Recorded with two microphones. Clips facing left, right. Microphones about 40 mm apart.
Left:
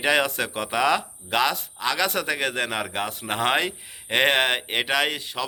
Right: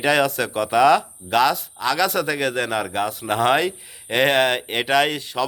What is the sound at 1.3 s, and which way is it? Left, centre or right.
A man's voice, left.